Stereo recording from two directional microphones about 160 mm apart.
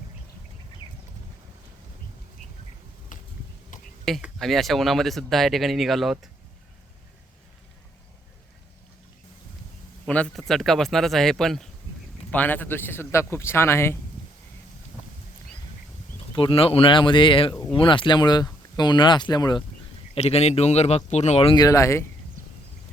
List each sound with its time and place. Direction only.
3.1 s a sound: 55° left (ahead or behind)
4.0 s speech: centre (ahead or behind)
10.1 s speech: 5° left (ahead or behind)
16.3 s speech: 35° left (ahead or behind)
20.1 s speech: 40° left (ahead or behind)
21.5 s speech: 20° left (ahead or behind)